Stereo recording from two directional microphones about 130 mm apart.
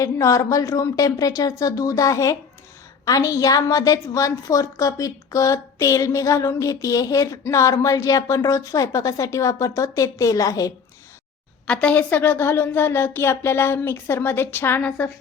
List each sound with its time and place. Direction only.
0.0 s a woman's voice: 25° left (ahead or behind)
11.6 s speech: 10° left (ahead or behind)